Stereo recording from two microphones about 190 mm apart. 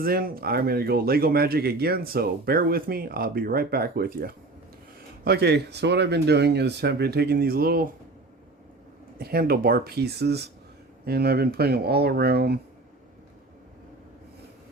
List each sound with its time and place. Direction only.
0.0 s speech: 50° right (ahead or behind)
9.1 s speech: 50° right (ahead or behind)